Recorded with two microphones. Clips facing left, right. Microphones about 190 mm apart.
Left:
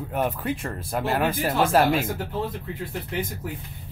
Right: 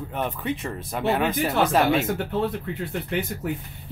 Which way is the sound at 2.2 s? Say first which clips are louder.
Right 4 dB; 70° right (ahead or behind).